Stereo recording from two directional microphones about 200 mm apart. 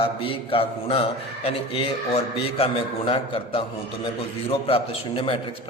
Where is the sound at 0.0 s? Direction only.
25° left (ahead or behind).